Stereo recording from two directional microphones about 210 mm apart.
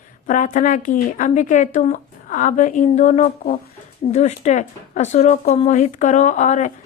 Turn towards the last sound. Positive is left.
turn(degrees=35)  # may be behind; listen again after turning